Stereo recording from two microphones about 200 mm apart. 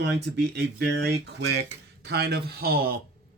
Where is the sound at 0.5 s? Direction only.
55° right (ahead or behind).